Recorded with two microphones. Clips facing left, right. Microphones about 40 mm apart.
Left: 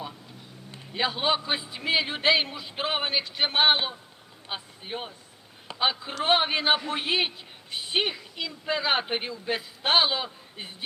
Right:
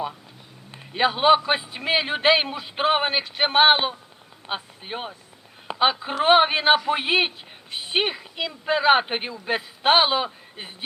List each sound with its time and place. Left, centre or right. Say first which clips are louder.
0.7 s a man's voice: right 6 dB; right